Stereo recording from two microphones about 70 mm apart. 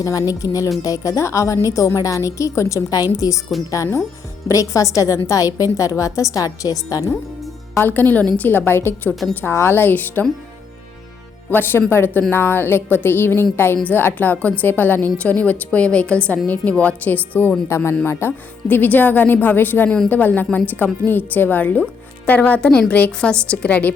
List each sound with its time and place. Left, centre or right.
0.0 s a woman's voice: left
7.8 s a woman's voice: left
11.5 s a woman's voice: left
17.7 s a woman's voice: left